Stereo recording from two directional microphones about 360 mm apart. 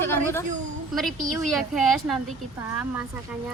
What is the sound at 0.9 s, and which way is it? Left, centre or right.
A woman's voice, centre.